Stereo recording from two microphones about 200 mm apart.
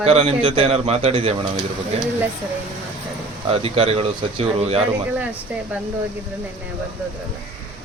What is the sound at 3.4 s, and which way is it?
A man's voice, 30° right (ahead or behind).